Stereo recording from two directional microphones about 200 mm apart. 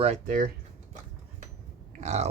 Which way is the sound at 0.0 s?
40° right (ahead or behind).